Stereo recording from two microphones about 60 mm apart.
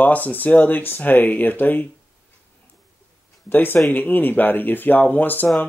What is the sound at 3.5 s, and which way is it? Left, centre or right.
Speech, left.